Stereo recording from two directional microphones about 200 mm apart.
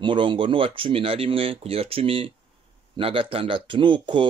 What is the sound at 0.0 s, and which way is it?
Speech, 25° right (ahead or behind).